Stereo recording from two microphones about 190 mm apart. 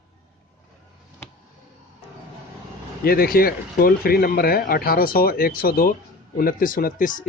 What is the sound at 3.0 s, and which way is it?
Speech, 50° left (ahead or behind).